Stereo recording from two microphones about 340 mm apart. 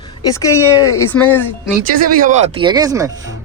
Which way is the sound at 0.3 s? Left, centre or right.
Centre.